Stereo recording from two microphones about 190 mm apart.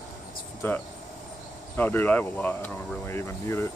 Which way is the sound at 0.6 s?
10° left (ahead or behind).